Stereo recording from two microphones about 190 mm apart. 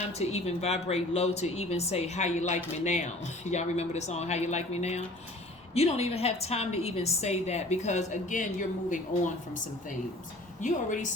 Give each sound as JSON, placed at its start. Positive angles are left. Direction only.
{"t": 0.2, "sound": "a woman's voice", "side_deg": 35}
{"t": 10.6, "sound": "a woman's voice", "side_deg": 40}